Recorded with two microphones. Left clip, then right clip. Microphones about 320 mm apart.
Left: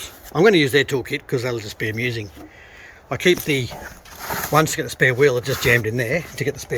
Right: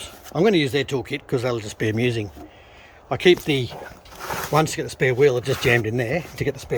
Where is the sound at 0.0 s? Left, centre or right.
Centre.